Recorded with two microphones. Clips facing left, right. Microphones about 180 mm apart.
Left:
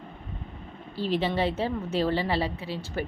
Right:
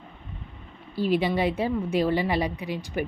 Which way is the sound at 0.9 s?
10° right (ahead or behind).